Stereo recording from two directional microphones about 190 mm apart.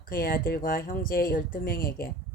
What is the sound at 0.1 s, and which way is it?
Speech, 50° left (ahead or behind).